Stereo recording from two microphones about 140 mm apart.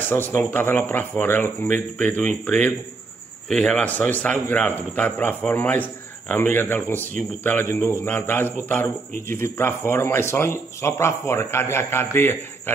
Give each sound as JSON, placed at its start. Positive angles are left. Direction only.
{"t": 0.1, "sound": "a man's voice", "side_deg": 15}